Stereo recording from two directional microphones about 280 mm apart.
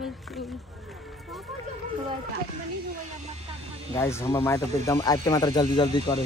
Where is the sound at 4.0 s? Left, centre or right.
Centre.